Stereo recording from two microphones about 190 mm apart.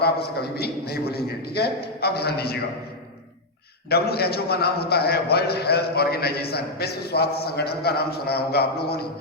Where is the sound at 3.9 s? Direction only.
55° left (ahead or behind).